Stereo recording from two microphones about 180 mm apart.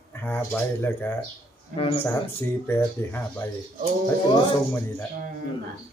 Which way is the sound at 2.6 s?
10° left (ahead or behind).